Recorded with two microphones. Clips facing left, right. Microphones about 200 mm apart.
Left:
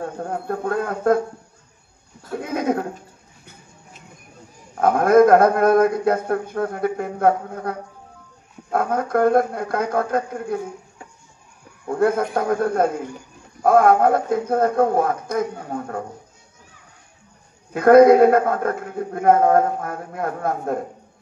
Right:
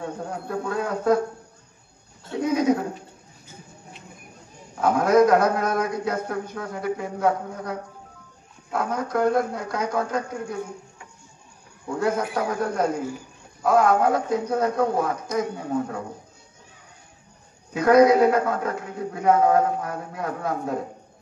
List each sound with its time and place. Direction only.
0.0 s a man's voice: 55° left (ahead or behind)
2.3 s a sound: 55° left (ahead or behind)
4.7 s a man's voice: 55° left (ahead or behind)
11.9 s a man's voice: 55° left (ahead or behind)
17.7 s a man's voice: 55° left (ahead or behind)